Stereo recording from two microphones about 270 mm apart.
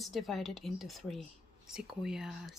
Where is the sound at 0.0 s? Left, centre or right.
Centre.